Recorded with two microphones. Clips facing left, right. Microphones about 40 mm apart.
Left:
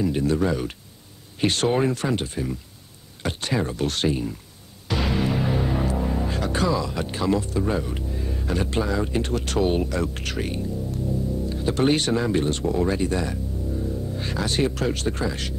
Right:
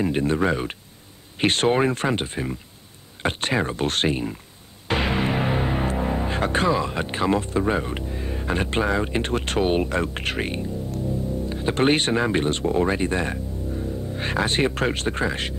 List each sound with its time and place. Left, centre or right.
0.0 s speech: right
4.8 s music: right
5.9 s speech: right